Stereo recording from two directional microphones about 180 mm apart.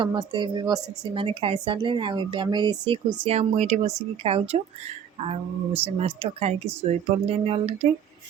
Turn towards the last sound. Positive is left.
turn(degrees=-35)  # may be behind; listen again after turning